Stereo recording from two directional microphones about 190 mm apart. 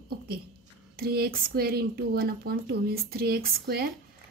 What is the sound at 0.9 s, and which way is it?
A woman's voice, 55° right (ahead or behind).